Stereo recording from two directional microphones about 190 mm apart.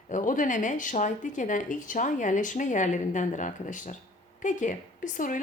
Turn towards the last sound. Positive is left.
turn(degrees=45)  # may be behind; listen again after turning